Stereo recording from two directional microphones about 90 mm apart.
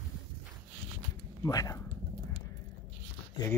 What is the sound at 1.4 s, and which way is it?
Speech, 40° left (ahead or behind).